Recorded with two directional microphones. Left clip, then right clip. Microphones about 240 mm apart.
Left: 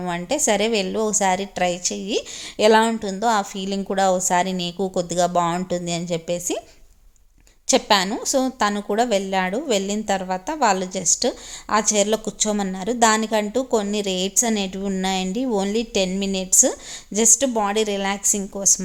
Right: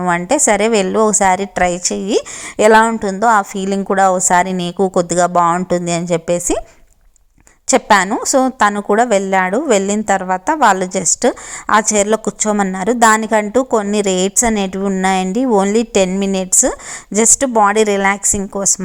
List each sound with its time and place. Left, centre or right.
0.0 s a woman's voice: centre
7.7 s a woman's voice: right
18.2 s speech: centre
18.5 s a woman's voice: centre